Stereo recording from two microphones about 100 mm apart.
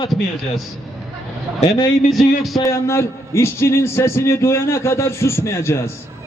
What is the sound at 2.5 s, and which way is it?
A man's voice, 30° left (ahead or behind).